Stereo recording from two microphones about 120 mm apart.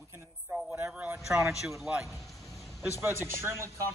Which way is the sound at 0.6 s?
10° right (ahead or behind).